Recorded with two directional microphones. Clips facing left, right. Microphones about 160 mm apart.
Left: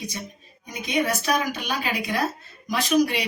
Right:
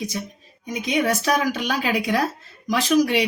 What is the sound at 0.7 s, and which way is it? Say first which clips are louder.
A woman's voice: right 3 dB; 90° right.